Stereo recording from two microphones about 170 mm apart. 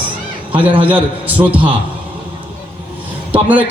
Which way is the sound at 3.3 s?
10° right (ahead or behind).